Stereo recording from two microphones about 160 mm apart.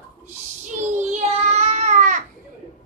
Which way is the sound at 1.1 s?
45° right (ahead or behind).